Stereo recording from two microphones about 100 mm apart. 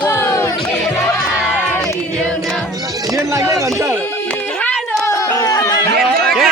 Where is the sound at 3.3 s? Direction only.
30° right (ahead or behind).